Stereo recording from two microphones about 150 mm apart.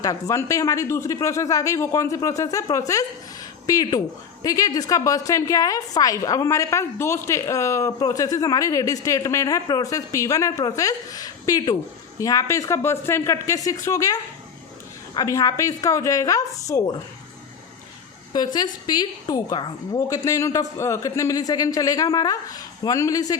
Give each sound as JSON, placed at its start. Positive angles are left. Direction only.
{"t": 0.0, "sound": "a woman's voice", "side_deg": 20}
{"t": 18.3, "sound": "a woman's voice", "side_deg": 25}